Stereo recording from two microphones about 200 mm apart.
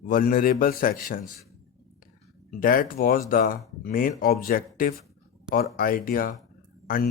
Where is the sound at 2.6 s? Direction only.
45° left (ahead or behind).